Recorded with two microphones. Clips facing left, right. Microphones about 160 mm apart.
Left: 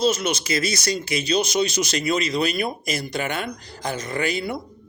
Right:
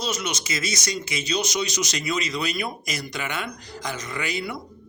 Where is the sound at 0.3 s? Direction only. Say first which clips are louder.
Left 5 dB; 30° left (ahead or behind).